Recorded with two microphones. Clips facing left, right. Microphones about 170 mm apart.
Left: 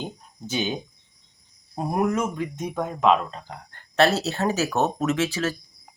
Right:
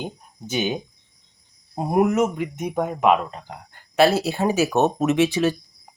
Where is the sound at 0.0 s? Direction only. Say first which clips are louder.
Right 2 dB; 15° right (ahead or behind).